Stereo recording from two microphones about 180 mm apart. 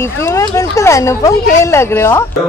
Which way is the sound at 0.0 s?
15° left (ahead or behind).